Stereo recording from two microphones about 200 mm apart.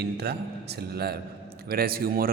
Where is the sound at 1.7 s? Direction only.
50° right (ahead or behind).